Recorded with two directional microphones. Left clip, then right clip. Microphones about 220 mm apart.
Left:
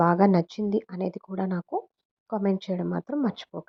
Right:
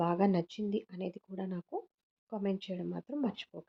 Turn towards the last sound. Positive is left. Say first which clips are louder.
# left 8 dB
turn(degrees=30)  # may be behind; listen again after turning